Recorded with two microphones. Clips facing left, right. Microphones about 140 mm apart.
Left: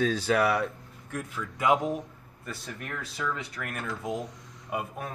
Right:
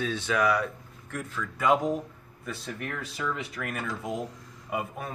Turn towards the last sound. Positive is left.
turn(degrees=0)  # may be behind; listen again after turning